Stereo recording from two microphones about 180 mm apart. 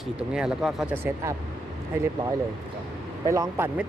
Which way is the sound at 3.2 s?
15° right (ahead or behind).